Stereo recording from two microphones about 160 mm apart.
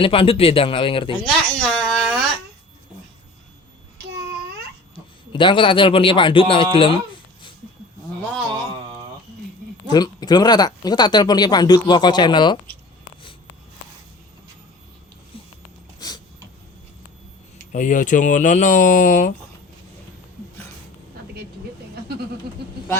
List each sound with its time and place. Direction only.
0.0 s speech: 35° left (ahead or behind)
1.2 s speech: 5° left (ahead or behind)
4.9 s a man's voice: 30° left (ahead or behind)
9.9 s speech: 25° left (ahead or behind)
16.0 s vehicle: 25° left (ahead or behind)
17.7 s speech: 50° left (ahead or behind)